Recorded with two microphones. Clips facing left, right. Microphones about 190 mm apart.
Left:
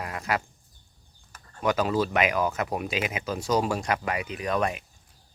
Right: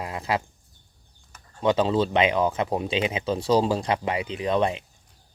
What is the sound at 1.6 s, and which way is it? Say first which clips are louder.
Speech: right 3 dB; 25° right (ahead or behind).